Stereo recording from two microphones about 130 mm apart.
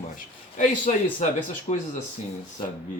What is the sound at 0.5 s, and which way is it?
A man's voice, 80° left.